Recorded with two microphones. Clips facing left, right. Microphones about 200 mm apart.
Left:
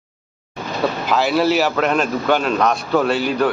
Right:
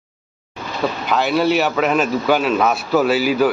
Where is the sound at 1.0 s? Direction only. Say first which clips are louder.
Even; centre (ahead or behind).